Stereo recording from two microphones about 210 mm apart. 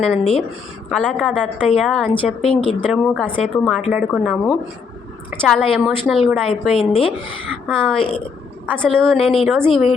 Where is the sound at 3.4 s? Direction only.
Centre (ahead or behind).